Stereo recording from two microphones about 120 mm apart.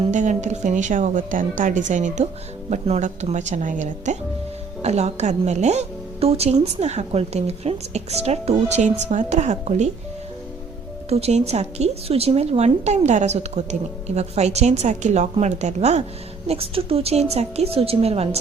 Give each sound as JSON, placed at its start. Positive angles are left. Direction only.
{"t": 0.1, "sound": "a woman's voice", "side_deg": -90}
{"t": 2.6, "sound": "speech", "side_deg": -65}
{"t": 4.8, "sound": "a woman's voice", "side_deg": -65}
{"t": 11.1, "sound": "a woman's voice", "side_deg": -65}
{"t": 16.5, "sound": "a woman's voice", "side_deg": -50}